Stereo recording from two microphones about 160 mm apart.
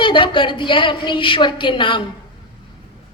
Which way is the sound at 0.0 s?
30° left (ahead or behind).